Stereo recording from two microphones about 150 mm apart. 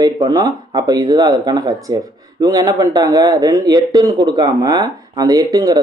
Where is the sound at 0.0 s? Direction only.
25° right (ahead or behind).